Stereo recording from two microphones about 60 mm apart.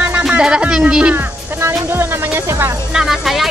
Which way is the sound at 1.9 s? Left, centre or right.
Right.